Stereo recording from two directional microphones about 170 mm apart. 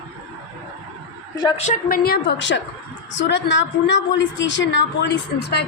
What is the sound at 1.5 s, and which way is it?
Speech, 40° left (ahead or behind).